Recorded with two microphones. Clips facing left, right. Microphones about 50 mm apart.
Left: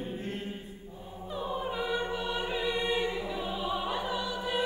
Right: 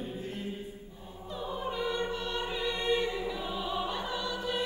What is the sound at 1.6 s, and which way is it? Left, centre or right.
Choir, centre.